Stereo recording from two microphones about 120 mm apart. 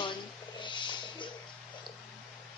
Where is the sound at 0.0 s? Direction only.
40° left (ahead or behind).